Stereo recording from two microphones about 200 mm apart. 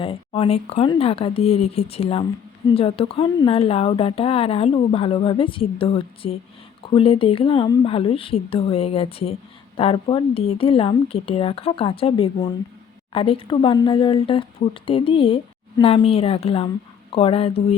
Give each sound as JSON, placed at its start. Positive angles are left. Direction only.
{"t": 0.0, "sound": "speech", "side_deg": 30}